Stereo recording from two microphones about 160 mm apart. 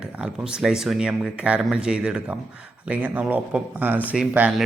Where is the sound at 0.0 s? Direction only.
5° right (ahead or behind).